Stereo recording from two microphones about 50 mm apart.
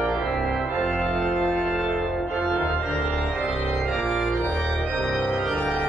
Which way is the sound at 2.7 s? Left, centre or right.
Centre.